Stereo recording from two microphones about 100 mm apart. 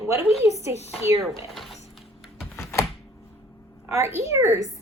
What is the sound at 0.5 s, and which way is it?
Speech, 90° left.